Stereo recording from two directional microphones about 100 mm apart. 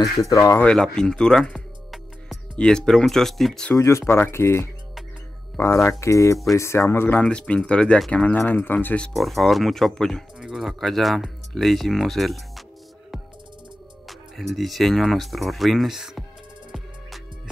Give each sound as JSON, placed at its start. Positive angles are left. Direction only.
{"t": 0.0, "sound": "speech", "side_deg": 35}
{"t": 0.6, "sound": "speech", "side_deg": 10}
{"t": 3.7, "sound": "speech", "side_deg": 30}
{"t": 7.2, "sound": "speech", "side_deg": 10}
{"t": 9.1, "sound": "speech", "side_deg": 0}
{"t": 14.0, "sound": "speech", "side_deg": 0}